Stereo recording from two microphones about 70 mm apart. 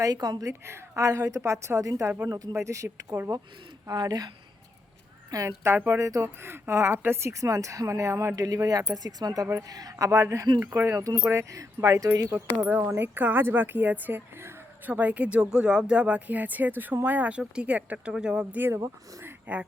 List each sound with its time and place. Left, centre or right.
0.0 s a woman's voice: right
0.4 s a woman's voice: right
2.5 s a woman's voice: right
3.8 s speech: right
5.3 s speech: right
5.7 s speech: right
6.0 s a woman's voice: right
6.2 s a woman's voice: right
8.4 s speech: right
10.1 s a woman's voice: right
10.8 s speech: right
11.0 s speech: right
12.3 s a woman's voice: right
18.5 s a woman's voice: right